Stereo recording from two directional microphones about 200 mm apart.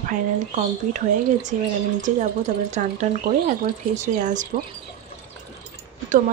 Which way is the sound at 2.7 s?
35° right (ahead or behind).